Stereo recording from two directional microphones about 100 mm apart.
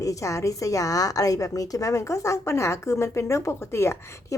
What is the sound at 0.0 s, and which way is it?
A woman's voice, 35° left (ahead or behind).